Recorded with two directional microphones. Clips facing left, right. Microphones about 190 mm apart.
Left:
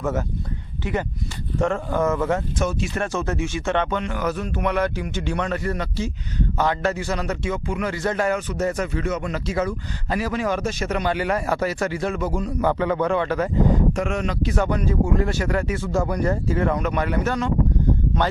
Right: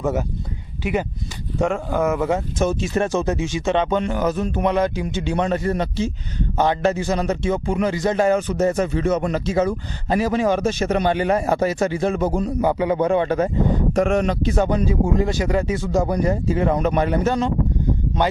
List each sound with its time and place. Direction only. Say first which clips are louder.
0.0 s a man's voice: right 2 dB; 15° right (ahead or behind)
12.6 s a man's voice: right 1 dB; 15° right (ahead or behind)
16.7 s a man's voice: right 4 dB; 30° right (ahead or behind)